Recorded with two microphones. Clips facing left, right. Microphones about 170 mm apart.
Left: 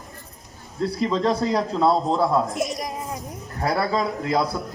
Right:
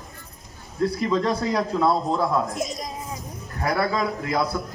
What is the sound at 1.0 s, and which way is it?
A man's voice, 30° left (ahead or behind).